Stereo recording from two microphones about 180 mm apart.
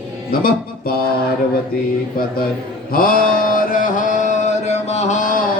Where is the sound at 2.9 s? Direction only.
55° left (ahead or behind).